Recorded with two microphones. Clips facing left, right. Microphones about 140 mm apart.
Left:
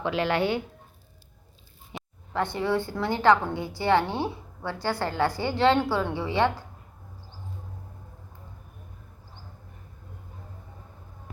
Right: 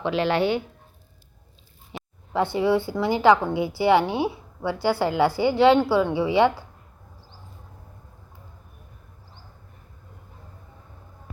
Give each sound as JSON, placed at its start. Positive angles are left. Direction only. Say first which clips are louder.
{"t": 0.0, "sound": "speech", "louder": "right 3 dB", "side_deg": -25}
{"t": 1.9, "sound": "a sound", "louder": "right 2 dB", "side_deg": -25}
{"t": 2.3, "sound": "a woman's voice", "louder": "right 5 dB", "side_deg": -10}